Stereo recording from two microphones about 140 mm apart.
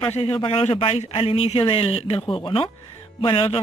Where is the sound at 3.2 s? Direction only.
40° left (ahead or behind).